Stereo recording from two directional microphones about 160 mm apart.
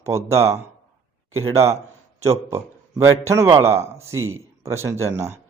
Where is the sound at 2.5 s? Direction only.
20° right (ahead or behind).